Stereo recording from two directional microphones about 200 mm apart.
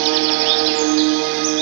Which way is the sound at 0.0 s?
90° right.